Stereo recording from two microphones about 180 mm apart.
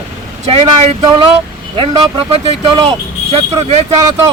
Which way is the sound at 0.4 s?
35° right (ahead or behind).